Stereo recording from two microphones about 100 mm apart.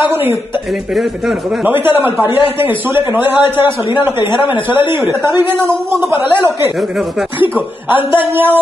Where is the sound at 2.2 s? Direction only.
55° left (ahead or behind).